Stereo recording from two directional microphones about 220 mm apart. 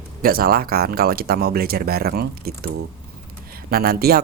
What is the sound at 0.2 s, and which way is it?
Speech, 40° right (ahead or behind).